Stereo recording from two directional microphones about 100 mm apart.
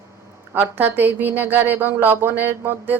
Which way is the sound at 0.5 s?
20° right (ahead or behind).